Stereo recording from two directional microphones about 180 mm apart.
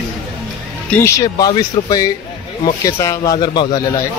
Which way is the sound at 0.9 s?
15° left (ahead or behind).